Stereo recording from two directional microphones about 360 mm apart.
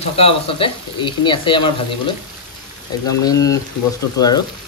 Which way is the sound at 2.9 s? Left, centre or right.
Centre.